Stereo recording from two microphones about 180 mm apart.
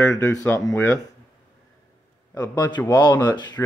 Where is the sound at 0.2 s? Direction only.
15° left (ahead or behind).